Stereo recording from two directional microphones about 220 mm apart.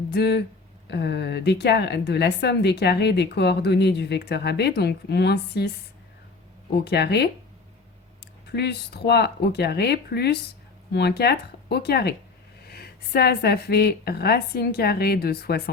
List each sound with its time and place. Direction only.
0.1 s a woman's voice: 50° left (ahead or behind)
6.8 s a woman's voice: 50° left (ahead or behind)
8.4 s a woman's voice: 50° left (ahead or behind)